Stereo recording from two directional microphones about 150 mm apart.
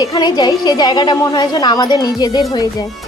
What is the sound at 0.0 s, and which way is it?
A woman's voice, 25° left (ahead or behind).